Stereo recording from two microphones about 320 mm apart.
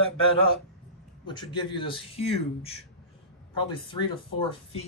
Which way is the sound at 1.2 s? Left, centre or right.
Centre.